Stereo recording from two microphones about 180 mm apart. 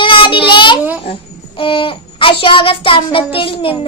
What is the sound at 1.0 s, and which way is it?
A child's voice, 30° left (ahead or behind).